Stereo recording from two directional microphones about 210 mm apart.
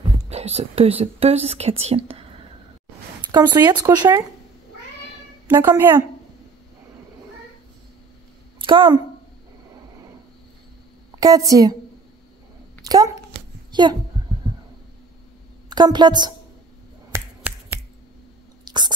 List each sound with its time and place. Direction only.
0.3 s speech: 30° right (ahead or behind)
3.3 s speech: 20° right (ahead or behind)
5.5 s a woman's voice: 10° right (ahead or behind)
8.5 s speech: 25° right (ahead or behind)
11.1 s a woman's voice: 15° right (ahead or behind)
12.8 s speech: 15° right (ahead or behind)
13.7 s a sound: 20° right (ahead or behind)
15.7 s speech: 20° right (ahead or behind)
17.1 s finger snapping: 10° right (ahead or behind)
18.7 s whispering: 20° right (ahead or behind)